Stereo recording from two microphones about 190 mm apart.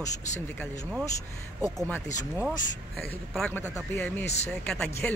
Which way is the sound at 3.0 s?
5° left (ahead or behind).